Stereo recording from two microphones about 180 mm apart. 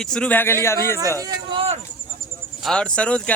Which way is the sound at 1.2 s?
25° right (ahead or behind).